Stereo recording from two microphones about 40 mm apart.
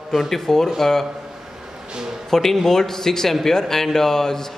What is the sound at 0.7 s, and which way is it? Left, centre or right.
Speech, centre.